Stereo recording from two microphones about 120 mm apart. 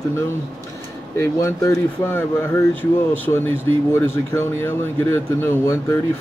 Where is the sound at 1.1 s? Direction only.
25° left (ahead or behind).